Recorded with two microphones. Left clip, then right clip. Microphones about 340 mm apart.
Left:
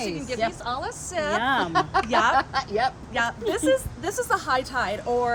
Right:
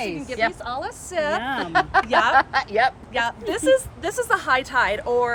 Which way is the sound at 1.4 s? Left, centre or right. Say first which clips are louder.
Left 3 dB; centre.